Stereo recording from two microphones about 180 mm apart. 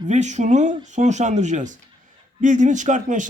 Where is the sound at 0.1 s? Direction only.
40° right (ahead or behind).